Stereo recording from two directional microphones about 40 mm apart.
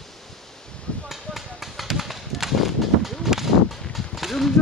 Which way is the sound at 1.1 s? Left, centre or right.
Centre.